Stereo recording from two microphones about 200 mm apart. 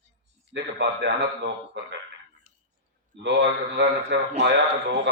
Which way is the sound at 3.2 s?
65° right (ahead or behind).